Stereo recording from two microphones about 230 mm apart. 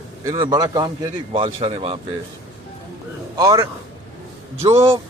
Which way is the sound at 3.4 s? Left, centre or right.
Centre.